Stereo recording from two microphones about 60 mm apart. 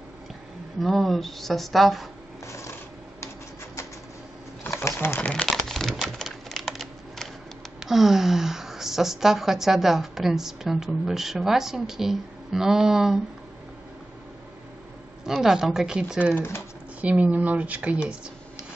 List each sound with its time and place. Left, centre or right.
0.7 s a woman's voice: centre
2.4 s a sound: left
4.8 s a sound: left
5.3 s crumpling: centre
5.9 s typewriter: centre
7.8 s a woman's voice: centre
15.4 s speech: centre
17.0 s speech: right